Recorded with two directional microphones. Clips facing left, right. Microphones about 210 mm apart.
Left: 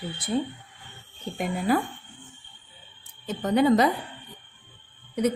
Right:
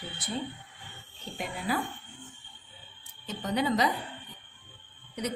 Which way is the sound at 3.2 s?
50° left (ahead or behind).